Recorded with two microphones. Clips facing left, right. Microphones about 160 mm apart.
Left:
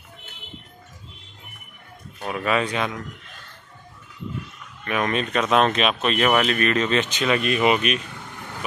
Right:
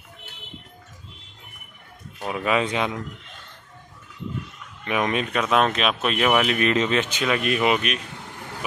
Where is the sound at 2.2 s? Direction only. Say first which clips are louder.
Even; 15° right (ahead or behind).